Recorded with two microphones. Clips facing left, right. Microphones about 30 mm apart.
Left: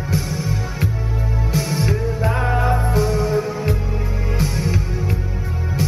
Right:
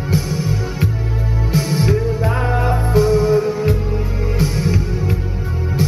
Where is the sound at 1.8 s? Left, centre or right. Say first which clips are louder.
Right 3 dB; centre.